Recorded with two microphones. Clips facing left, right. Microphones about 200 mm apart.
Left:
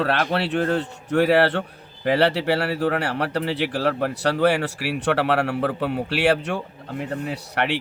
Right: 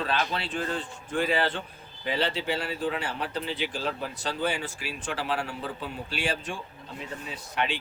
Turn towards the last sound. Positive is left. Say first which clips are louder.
# left 6 dB
turn(degrees=70)  # may be behind; listen again after turning